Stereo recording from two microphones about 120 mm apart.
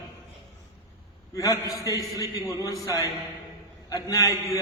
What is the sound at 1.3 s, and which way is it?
A man's voice, 30° left (ahead or behind).